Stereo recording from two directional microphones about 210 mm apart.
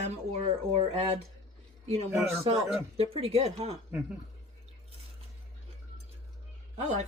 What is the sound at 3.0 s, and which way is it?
Speech, 30° right (ahead or behind).